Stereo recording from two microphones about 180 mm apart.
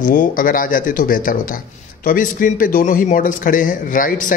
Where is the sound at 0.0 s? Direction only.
50° left (ahead or behind).